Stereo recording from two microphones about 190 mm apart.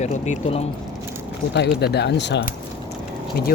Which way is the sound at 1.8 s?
60° left (ahead or behind).